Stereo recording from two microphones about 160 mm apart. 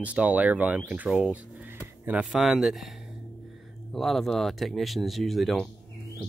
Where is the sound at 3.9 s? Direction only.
Centre (ahead or behind).